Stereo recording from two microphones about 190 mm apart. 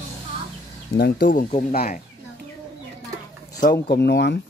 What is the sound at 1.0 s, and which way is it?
Speech, 45° left (ahead or behind).